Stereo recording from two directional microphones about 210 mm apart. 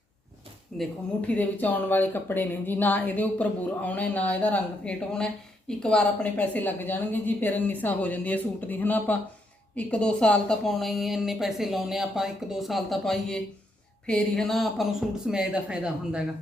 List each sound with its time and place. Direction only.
0.7 s a woman's voice: centre (ahead or behind)